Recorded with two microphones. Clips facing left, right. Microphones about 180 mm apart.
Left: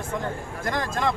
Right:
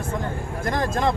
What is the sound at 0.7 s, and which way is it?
Speech, 25° right (ahead or behind).